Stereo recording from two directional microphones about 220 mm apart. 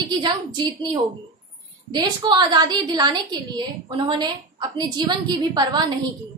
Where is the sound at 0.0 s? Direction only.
20° right (ahead or behind).